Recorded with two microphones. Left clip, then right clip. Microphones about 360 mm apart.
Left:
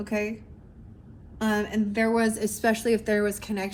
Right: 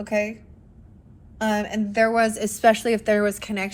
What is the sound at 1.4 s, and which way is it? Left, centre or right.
A woman's voice, right.